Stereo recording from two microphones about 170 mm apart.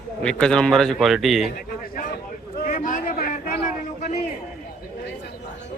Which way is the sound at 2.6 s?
50° left (ahead or behind).